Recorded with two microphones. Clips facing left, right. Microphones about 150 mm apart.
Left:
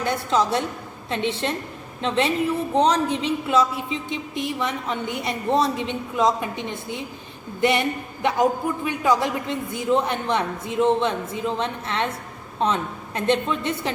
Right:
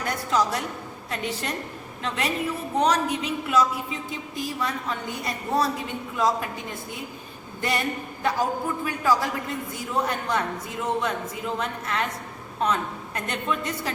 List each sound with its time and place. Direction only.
0.0 s a man's voice: 25° left (ahead or behind)